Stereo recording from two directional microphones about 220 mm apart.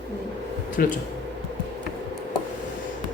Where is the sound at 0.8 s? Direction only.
40° left (ahead or behind).